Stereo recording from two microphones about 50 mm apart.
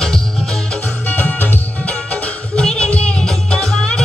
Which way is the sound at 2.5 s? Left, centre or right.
Centre.